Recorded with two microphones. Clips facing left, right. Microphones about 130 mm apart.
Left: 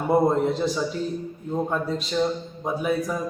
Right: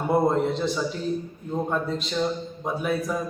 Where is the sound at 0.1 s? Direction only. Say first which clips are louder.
Left 2 dB; centre (ahead or behind).